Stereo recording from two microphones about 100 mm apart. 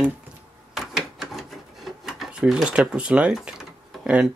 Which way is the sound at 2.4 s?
10° right (ahead or behind).